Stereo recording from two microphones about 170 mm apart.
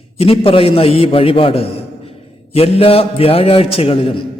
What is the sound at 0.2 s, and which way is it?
A man's voice, 35° left (ahead or behind).